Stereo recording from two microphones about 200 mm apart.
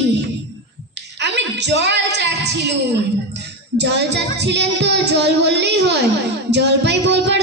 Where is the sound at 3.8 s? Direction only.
60° right (ahead or behind).